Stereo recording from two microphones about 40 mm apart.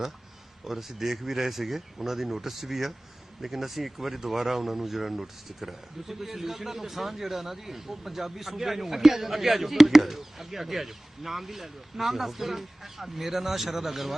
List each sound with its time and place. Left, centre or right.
0.6 s speech: centre